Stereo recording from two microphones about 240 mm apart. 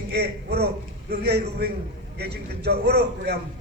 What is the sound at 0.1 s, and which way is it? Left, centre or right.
A man's voice, right.